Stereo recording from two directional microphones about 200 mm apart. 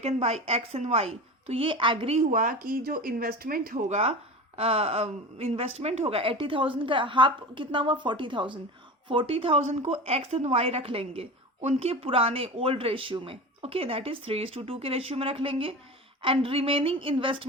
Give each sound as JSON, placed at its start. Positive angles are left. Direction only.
{"t": 0.0, "sound": "a woman's voice", "side_deg": -30}
{"t": 2.3, "sound": "speech", "side_deg": -40}